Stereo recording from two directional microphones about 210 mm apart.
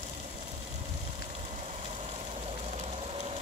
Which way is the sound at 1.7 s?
30° right (ahead or behind).